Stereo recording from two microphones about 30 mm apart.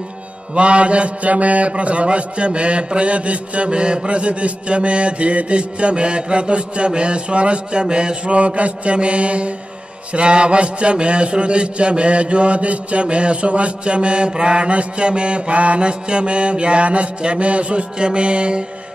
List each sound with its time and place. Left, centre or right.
0.6 s mantra: right
3.7 s mantra: right
8.4 s mantra: right
13.0 s mantra: right
15.8 s mantra: right
17.9 s mantra: right